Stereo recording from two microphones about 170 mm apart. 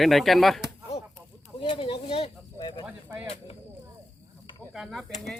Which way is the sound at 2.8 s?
10° right (ahead or behind).